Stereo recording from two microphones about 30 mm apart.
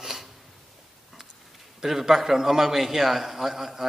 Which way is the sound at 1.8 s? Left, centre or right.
Centre.